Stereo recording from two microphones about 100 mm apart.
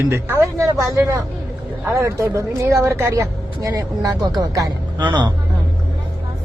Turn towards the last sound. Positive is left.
turn(degrees=-50)  # may be behind; listen again after turning